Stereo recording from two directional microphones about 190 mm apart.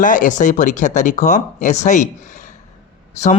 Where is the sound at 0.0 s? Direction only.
45° left (ahead or behind).